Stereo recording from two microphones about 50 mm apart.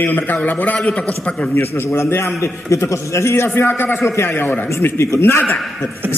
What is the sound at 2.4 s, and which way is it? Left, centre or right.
A man's voice, left.